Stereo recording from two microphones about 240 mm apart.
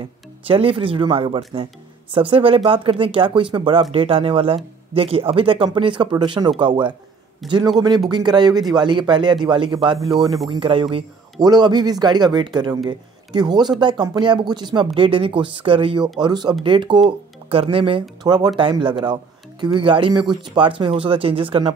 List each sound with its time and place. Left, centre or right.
0.5 s speech: right